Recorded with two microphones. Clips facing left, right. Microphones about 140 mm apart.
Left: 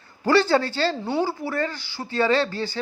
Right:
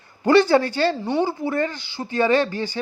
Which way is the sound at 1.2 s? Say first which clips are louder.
Right 3 dB; 20° right (ahead or behind).